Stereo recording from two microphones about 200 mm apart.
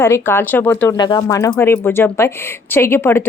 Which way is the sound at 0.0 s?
10° left (ahead or behind).